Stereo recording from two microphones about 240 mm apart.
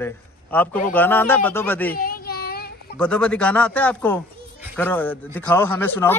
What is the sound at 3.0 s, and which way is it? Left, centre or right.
A man's voice, centre.